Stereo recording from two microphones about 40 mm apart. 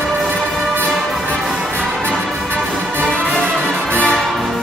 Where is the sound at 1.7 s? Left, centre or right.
Left.